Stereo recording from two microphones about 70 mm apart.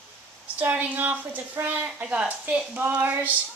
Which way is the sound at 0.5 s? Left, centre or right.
Right.